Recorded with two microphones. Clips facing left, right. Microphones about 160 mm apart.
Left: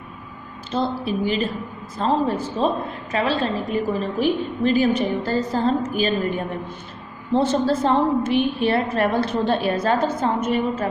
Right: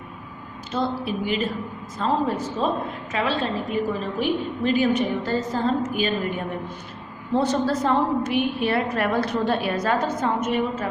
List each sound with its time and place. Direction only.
0.7 s a woman's voice: 30° left (ahead or behind)